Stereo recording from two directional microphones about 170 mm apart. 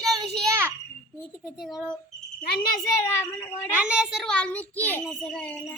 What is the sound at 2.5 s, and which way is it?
Speech, 60° left (ahead or behind).